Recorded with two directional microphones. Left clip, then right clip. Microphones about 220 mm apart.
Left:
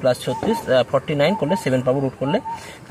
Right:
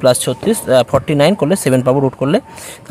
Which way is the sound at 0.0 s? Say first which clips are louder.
Right 7 dB; 45° right (ahead or behind).